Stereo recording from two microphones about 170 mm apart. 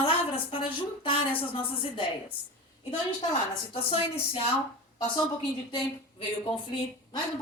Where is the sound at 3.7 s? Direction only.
35° left (ahead or behind).